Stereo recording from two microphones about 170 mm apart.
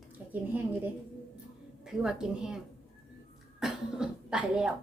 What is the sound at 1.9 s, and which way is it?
A woman's voice, 5° right (ahead or behind).